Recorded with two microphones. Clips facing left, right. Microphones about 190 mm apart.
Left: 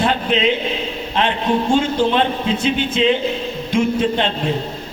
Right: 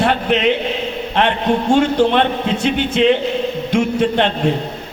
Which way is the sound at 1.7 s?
65° right (ahead or behind).